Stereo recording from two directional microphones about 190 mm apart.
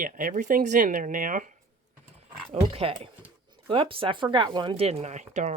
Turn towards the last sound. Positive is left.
turn(degrees=-40)  # may be behind; listen again after turning